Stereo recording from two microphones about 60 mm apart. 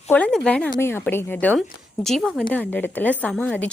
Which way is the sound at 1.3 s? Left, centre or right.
Left.